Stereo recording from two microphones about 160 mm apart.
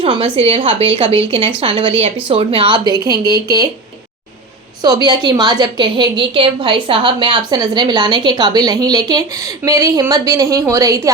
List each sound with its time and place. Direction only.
0.0 s a woman's voice: 35° right (ahead or behind)
5.0 s a woman's voice: 25° right (ahead or behind)